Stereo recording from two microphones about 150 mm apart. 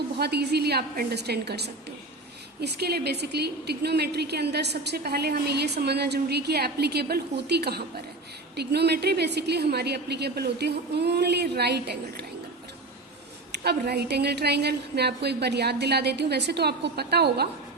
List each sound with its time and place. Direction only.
0.2 s a woman's voice: 90° right
13.7 s a woman's voice: 90° right